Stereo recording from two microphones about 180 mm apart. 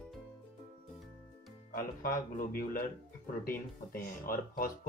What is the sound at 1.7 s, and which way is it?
Speech, 50° left (ahead or behind).